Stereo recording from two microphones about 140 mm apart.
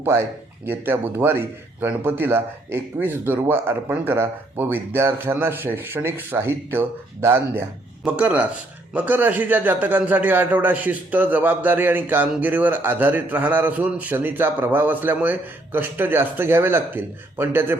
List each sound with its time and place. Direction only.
0.0 s a man's voice: 15° right (ahead or behind)